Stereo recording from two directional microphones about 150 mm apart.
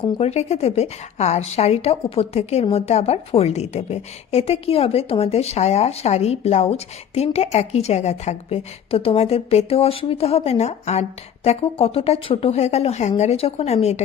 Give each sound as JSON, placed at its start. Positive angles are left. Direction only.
{"t": 0.2, "sound": "a woman's voice", "side_deg": 45}